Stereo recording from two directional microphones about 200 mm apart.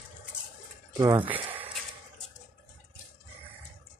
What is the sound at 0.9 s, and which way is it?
Speech, 25° right (ahead or behind).